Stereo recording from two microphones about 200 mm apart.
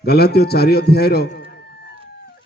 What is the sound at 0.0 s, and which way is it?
A man's voice, 50° left (ahead or behind).